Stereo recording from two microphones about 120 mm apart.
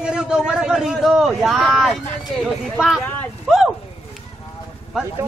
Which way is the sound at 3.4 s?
5° right (ahead or behind).